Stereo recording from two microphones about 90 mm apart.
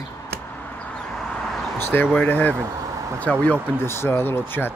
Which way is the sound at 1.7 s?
25° left (ahead or behind).